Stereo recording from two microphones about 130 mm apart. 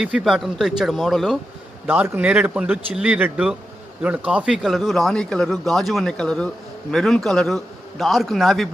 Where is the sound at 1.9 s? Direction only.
15° right (ahead or behind).